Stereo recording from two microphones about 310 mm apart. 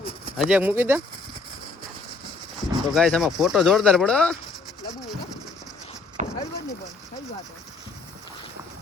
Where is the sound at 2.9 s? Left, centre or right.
Centre.